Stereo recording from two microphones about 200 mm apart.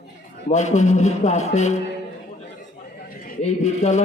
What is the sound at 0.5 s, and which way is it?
Speech, 35° left (ahead or behind).